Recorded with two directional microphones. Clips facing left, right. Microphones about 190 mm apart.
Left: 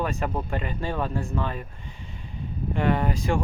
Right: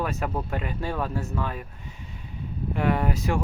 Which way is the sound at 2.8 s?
10° right (ahead or behind).